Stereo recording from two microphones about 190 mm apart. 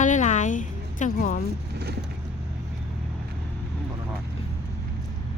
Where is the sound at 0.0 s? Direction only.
40° left (ahead or behind).